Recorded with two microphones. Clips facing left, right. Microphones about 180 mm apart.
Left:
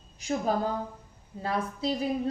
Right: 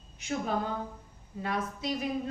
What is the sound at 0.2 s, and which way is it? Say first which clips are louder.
A woman's voice: left 4 dB; 35° left (ahead or behind).